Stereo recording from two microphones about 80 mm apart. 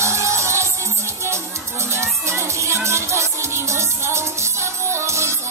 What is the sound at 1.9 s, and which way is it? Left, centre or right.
Music, right.